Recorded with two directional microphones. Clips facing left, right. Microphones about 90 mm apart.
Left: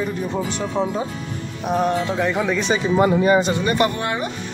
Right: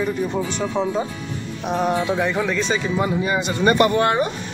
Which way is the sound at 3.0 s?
40° left (ahead or behind).